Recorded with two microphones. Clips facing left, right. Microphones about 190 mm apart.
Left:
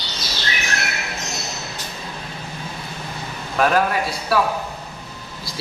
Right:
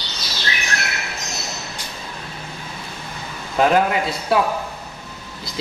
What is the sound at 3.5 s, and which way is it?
Speech, 20° right (ahead or behind).